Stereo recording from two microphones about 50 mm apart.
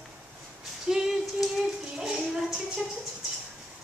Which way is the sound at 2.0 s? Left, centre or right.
Centre.